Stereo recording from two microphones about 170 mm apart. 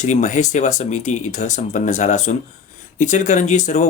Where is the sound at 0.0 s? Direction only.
45° left (ahead or behind).